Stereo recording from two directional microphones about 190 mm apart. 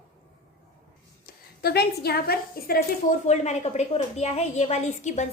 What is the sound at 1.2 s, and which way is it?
A woman's voice, 55° left (ahead or behind).